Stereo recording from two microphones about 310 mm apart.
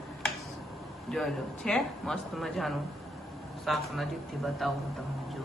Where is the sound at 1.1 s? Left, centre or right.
Centre.